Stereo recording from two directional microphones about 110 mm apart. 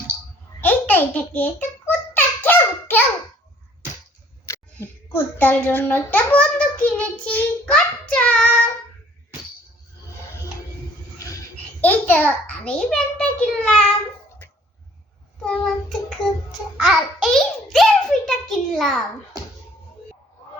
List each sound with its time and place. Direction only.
0.6 s a sound: 15° left (ahead or behind)
4.4 s a child's voice: 25° left (ahead or behind)
8.1 s child singing: 10° left (ahead or behind)
11.8 s a child's voice: 15° left (ahead or behind)
15.4 s child singing: 5° left (ahead or behind)
16.7 s a child's voice: centre (ahead or behind)